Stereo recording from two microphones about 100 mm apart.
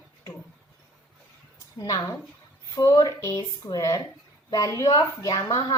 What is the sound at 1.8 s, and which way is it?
A woman's voice, 35° left (ahead or behind).